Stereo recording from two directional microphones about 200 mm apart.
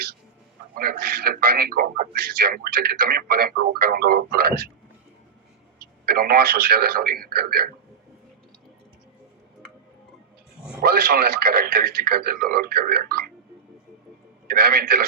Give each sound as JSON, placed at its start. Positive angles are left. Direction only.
{"t": 0.8, "sound": "a man's voice", "side_deg": -50}
{"t": 5.8, "sound": "a man's voice", "side_deg": -50}
{"t": 10.8, "sound": "a man's voice", "side_deg": -50}
{"t": 14.4, "sound": "a man's voice", "side_deg": -50}